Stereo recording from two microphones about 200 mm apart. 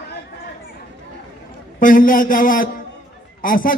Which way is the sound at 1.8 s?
45° left (ahead or behind).